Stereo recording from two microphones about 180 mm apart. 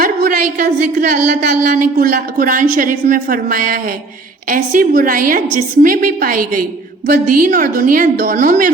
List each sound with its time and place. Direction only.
0.0 s a woman's voice: 55° right (ahead or behind)